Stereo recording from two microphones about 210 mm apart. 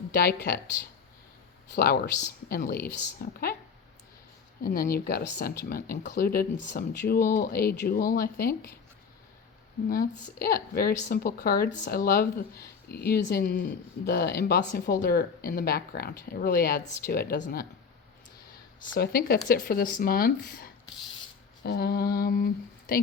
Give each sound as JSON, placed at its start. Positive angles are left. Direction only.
{"t": 0.1, "sound": "speech", "side_deg": 45}
{"t": 1.7, "sound": "speech", "side_deg": 45}
{"t": 4.6, "sound": "speech", "side_deg": 45}
{"t": 9.9, "sound": "speech", "side_deg": 45}
{"t": 18.9, "sound": "speech", "side_deg": 45}